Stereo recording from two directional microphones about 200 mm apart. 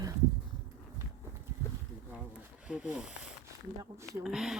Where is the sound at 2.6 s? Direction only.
5° right (ahead or behind).